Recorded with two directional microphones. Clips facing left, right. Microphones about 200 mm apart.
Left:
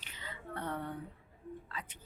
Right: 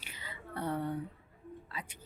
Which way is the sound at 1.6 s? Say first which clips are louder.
Right 1 dB; 10° right (ahead or behind).